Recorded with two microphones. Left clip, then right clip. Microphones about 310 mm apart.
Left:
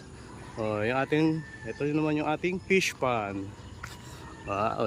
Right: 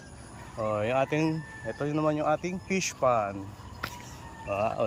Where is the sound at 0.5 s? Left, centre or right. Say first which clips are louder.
Right 1 dB; centre.